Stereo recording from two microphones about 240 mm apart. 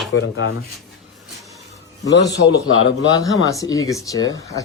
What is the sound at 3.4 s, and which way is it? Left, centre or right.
Speech, centre.